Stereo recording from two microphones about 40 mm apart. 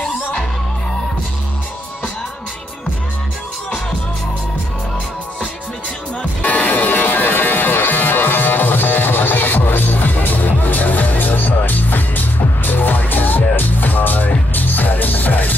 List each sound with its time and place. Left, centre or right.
6.4 s music: left